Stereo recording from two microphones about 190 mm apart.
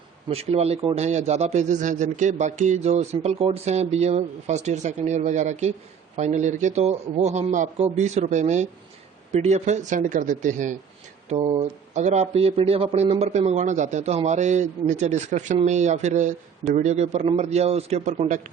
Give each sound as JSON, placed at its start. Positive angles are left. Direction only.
{"t": 0.3, "sound": "a man's voice", "side_deg": -30}
{"t": 11.3, "sound": "a man's voice", "side_deg": -25}